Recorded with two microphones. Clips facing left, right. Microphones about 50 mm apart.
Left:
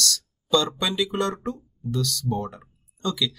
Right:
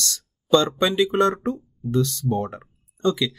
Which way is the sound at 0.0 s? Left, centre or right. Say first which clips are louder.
Left 4 dB; right.